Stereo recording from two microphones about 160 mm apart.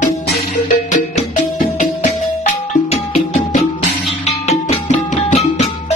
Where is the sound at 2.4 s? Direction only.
45° left (ahead or behind).